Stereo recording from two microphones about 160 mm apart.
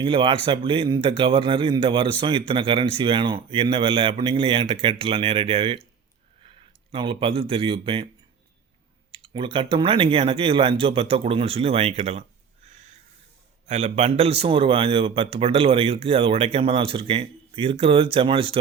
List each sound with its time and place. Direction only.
0.0 s a man's voice: 30° right (ahead or behind)
6.9 s a man's voice: 30° right (ahead or behind)
9.3 s a man's voice: 35° right (ahead or behind)
12.6 s a sound: 50° right (ahead or behind)
13.7 s a man's voice: 40° right (ahead or behind)